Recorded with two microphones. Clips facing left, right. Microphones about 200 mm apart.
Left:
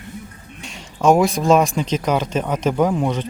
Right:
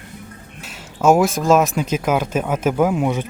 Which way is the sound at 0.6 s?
5° right (ahead or behind).